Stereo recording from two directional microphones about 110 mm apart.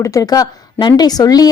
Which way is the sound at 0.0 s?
30° left (ahead or behind).